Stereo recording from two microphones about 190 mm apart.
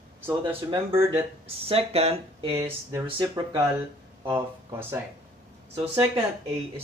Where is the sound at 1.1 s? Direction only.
30° right (ahead or behind).